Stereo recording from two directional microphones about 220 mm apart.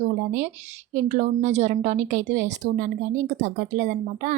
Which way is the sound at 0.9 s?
35° right (ahead or behind).